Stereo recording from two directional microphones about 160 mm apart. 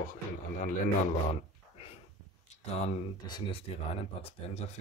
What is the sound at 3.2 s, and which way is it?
Speech, 25° left (ahead or behind).